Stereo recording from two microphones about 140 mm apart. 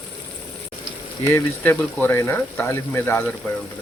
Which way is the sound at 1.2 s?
15° left (ahead or behind).